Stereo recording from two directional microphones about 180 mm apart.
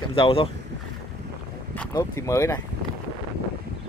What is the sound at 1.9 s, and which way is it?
Speech, 15° left (ahead or behind).